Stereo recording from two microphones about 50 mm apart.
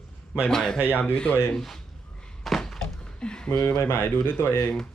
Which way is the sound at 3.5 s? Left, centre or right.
Left.